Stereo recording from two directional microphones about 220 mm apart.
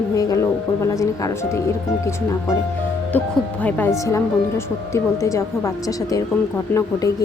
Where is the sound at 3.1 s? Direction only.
5° left (ahead or behind).